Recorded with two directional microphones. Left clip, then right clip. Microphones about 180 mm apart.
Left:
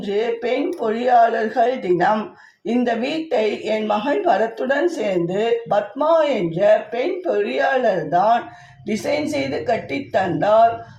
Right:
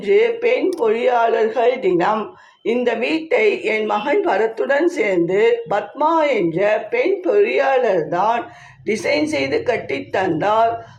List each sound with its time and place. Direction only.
0.1 s speech: 20° right (ahead or behind)